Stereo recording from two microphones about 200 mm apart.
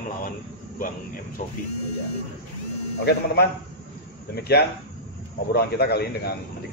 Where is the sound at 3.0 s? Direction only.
55° left (ahead or behind).